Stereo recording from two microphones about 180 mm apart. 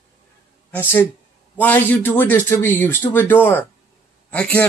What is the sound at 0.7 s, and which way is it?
Speech, 10° left (ahead or behind).